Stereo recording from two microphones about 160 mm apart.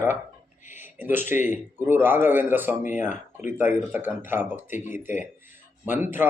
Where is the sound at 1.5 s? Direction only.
15° right (ahead or behind).